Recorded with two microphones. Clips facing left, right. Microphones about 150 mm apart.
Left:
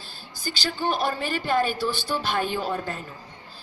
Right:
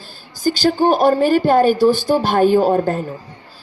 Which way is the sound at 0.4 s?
45° right (ahead or behind).